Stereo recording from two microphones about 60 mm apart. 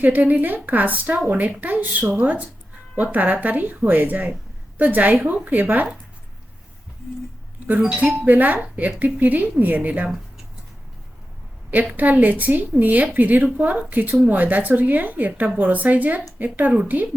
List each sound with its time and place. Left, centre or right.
0.0 s a woman's voice: right
7.9 s a woman's voice: right
11.9 s a woman's voice: right